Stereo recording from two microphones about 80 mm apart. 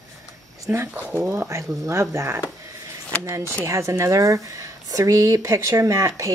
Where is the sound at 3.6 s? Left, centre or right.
Right.